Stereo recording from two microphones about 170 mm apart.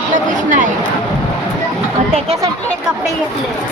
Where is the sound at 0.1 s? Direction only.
50° right (ahead or behind).